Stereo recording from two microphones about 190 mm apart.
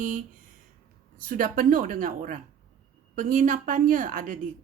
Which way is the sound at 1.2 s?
50° right (ahead or behind).